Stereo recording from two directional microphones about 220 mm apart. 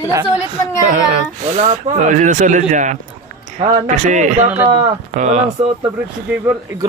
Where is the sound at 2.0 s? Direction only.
35° right (ahead or behind).